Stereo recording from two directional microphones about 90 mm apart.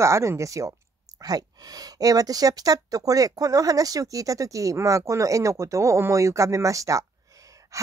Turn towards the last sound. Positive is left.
turn(degrees=-35)  # may be behind; listen again after turning